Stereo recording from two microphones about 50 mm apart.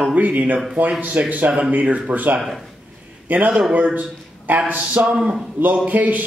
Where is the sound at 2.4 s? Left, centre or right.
Centre.